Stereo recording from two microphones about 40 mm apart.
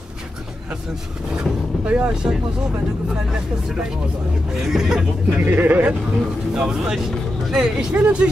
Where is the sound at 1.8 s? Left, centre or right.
Right.